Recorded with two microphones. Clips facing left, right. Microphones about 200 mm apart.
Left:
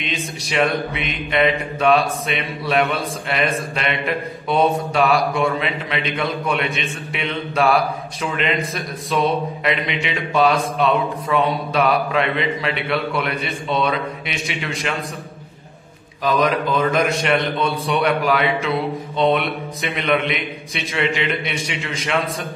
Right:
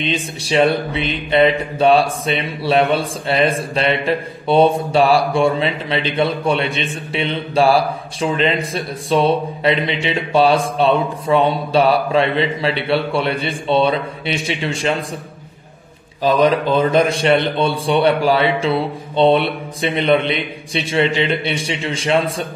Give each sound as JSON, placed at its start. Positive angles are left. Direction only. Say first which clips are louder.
{"t": 0.0, "sound": "speech", "louder": "right 5 dB", "side_deg": -30}
{"t": 16.2, "sound": "a man's voice", "louder": "right 4 dB", "side_deg": -30}